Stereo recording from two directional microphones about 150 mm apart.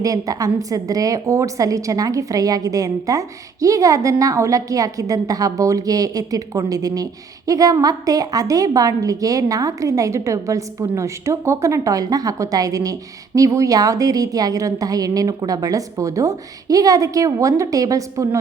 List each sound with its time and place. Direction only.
0.0 s a woman's voice: 25° right (ahead or behind)